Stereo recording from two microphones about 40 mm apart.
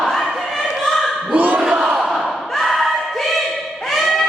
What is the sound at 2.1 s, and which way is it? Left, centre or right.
Thump, centre.